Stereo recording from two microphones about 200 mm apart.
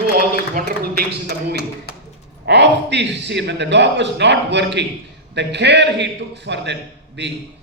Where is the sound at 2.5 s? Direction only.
60° right (ahead or behind).